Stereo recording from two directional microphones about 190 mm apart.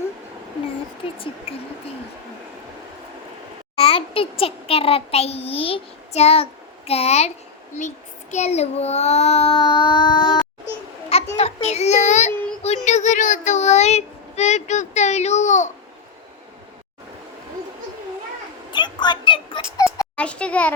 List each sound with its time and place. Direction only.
3.8 s a child's voice: 30° left (ahead or behind)
7.8 s child singing: 40° left (ahead or behind); by 10.4 s 25° left (ahead or behind)
11.3 s child singing: 35° left (ahead or behind)
18.7 s a sound: 25° left (ahead or behind); by 20.7 s 5° left (ahead or behind)